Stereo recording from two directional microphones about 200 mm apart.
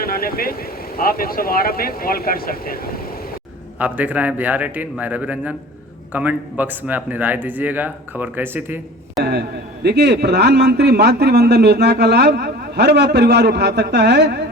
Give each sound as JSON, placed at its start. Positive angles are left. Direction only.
{"t": 0.0, "sound": "speech", "side_deg": 45}
{"t": 3.8, "sound": "speech", "side_deg": -10}
{"t": 9.2, "sound": "a man's voice", "side_deg": -55}